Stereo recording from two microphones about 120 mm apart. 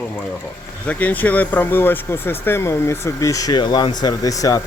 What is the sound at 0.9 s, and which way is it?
Speech, 15° left (ahead or behind).